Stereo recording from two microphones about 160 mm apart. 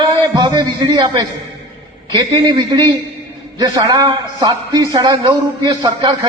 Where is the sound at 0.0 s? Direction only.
25° right (ahead or behind).